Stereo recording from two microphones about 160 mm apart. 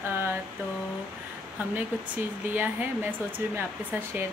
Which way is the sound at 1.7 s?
10° right (ahead or behind).